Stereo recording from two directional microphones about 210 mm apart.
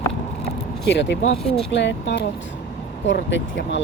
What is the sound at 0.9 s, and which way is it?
Speech, 55° left (ahead or behind).